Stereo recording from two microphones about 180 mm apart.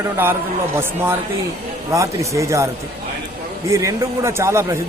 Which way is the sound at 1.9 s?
15° right (ahead or behind).